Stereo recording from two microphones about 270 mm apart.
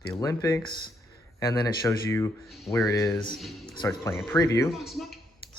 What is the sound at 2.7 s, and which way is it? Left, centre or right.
Speech, centre.